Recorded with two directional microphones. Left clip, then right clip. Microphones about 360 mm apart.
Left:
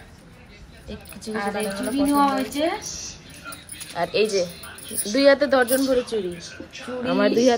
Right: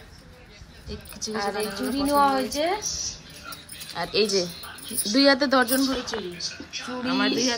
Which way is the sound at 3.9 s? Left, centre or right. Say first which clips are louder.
Left 2 dB; centre.